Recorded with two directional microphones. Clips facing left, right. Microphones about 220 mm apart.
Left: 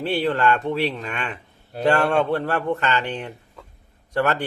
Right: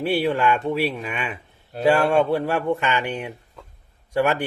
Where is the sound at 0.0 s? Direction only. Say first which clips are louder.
Right 1 dB; 10° right (ahead or behind).